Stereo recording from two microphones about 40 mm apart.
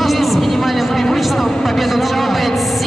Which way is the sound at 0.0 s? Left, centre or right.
Centre.